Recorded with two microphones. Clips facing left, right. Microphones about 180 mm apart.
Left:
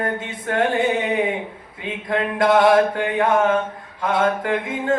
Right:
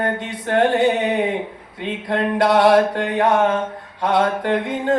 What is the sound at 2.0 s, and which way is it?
Mantra, 35° right (ahead or behind).